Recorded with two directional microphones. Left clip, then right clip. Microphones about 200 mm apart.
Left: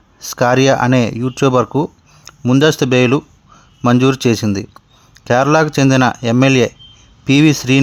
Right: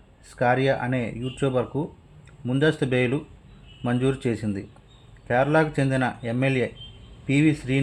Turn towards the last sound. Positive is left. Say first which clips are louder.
# left 11 dB
turn(degrees=45)  # may be behind; listen again after turning